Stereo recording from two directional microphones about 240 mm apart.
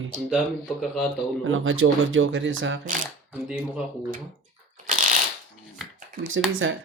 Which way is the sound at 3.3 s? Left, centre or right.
Centre.